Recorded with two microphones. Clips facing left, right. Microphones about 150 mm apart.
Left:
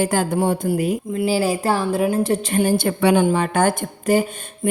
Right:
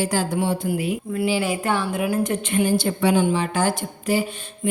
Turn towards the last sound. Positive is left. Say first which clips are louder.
# left 3 dB
turn(degrees=45)  # may be behind; listen again after turning